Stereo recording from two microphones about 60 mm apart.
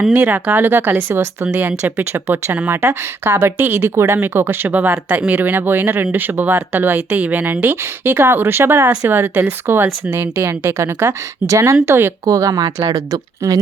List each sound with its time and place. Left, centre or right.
0.1 s speech: right
11.4 s speech: right
12.2 s speech: right